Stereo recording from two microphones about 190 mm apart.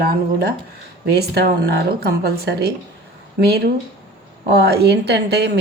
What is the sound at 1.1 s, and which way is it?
A woman's voice, 60° right (ahead or behind).